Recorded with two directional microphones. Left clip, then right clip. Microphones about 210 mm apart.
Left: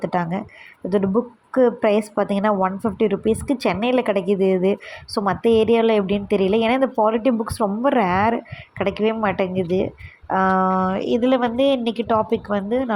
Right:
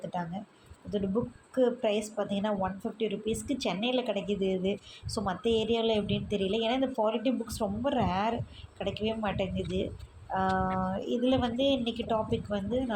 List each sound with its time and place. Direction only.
0.0 s a woman's voice: 35° left (ahead or behind)